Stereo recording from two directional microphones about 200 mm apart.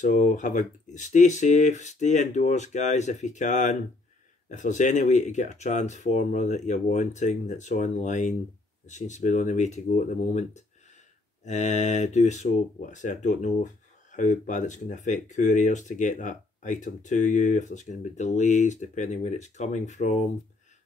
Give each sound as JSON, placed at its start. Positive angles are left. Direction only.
{"t": 0.0, "sound": "speech", "side_deg": 40}